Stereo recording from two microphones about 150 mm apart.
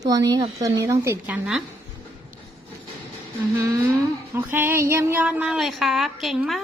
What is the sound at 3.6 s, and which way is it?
A woman's voice, 20° right (ahead or behind).